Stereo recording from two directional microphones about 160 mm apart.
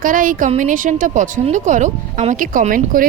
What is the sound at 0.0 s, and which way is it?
A woman's voice, 60° right (ahead or behind).